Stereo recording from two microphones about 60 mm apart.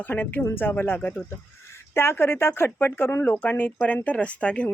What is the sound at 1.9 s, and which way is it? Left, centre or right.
Speech, left.